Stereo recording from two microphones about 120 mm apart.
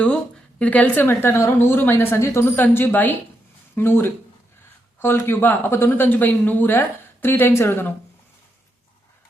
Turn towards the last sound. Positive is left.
turn(degrees=20)  # may be behind; listen again after turning